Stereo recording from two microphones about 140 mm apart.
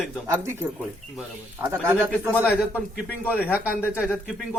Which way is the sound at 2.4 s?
15° left (ahead or behind).